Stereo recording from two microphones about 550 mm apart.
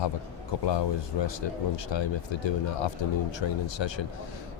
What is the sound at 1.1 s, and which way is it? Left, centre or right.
Speech, left.